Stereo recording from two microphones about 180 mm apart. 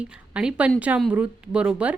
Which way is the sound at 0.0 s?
5° right (ahead or behind).